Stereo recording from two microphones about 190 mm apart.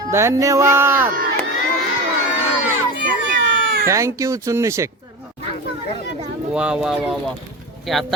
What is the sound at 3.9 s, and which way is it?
Speech, 15° right (ahead or behind).